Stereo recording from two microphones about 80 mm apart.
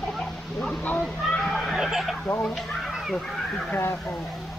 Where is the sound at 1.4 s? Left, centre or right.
Centre.